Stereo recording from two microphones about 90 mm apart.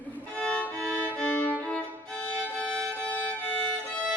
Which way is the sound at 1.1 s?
15° left (ahead or behind).